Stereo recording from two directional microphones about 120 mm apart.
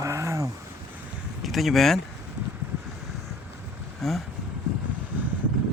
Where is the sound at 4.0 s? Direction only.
Centre (ahead or behind).